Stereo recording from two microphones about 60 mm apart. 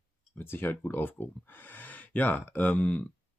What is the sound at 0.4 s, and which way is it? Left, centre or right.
Speech, left.